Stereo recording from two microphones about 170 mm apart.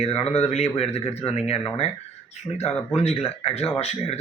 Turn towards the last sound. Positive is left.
turn(degrees=40)  # may be behind; listen again after turning